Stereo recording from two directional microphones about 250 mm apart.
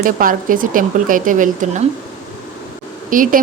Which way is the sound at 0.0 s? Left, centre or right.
Right.